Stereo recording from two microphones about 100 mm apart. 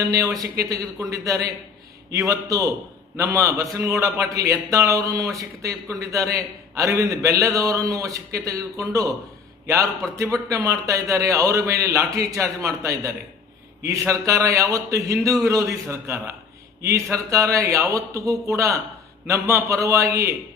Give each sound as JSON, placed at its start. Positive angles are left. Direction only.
{"t": 0.0, "sound": "a man's voice", "side_deg": -30}